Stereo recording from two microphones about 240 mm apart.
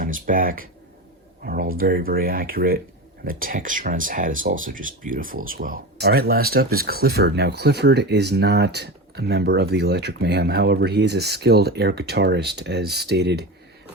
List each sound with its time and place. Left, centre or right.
0.0 s speech: right
1.7 s speech: right